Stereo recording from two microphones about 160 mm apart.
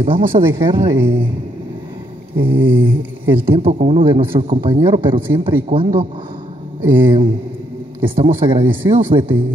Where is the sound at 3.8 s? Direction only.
35° right (ahead or behind).